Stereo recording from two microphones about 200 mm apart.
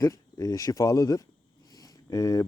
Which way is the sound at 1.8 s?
15° left (ahead or behind).